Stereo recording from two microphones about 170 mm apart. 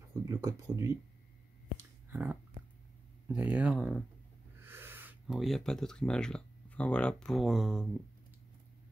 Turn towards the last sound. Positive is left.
turn(degrees=-5)  # may be behind; listen again after turning